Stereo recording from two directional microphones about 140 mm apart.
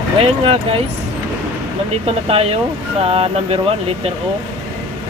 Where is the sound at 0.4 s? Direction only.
40° right (ahead or behind).